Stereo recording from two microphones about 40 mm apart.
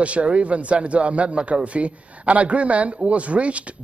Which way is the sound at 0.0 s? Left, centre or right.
Right.